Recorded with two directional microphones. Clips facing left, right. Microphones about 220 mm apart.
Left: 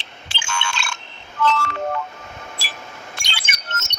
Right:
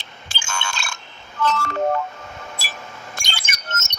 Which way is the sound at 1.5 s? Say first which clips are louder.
Right 2 dB; 40° right (ahead or behind).